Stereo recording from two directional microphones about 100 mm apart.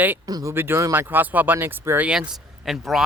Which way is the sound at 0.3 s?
40° right (ahead or behind).